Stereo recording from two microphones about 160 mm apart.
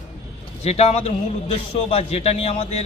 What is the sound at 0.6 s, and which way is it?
A man's voice, 40° left (ahead or behind).